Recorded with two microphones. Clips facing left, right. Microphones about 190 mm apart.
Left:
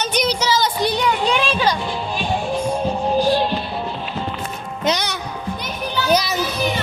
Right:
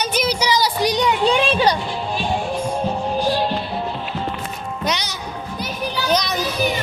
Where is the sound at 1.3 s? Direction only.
35° right (ahead or behind).